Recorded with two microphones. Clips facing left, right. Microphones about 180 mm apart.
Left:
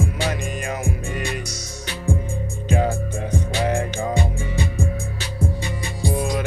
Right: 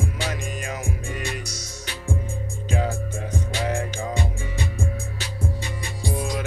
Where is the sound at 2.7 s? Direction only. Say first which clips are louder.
Left 5 dB; 60° left (ahead or behind).